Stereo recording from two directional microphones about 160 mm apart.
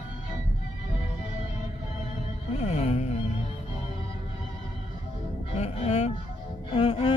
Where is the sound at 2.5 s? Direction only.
45° left (ahead or behind).